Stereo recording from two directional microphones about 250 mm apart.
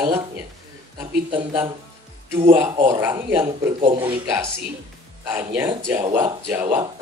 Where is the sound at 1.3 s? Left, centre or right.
Centre.